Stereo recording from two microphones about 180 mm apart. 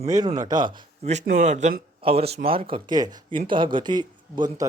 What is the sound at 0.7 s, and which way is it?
Speech, 40° right (ahead or behind).